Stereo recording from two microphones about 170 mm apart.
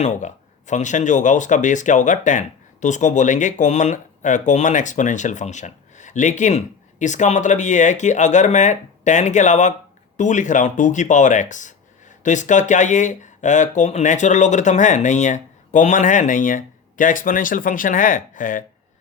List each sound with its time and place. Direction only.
0.0 s speech: 45° left (ahead or behind)